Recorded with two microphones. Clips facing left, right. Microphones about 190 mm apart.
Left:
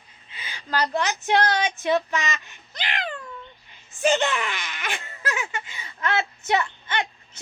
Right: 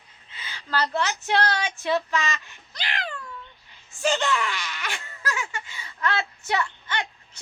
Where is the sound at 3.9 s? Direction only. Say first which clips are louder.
Left 2 dB; 20° left (ahead or behind).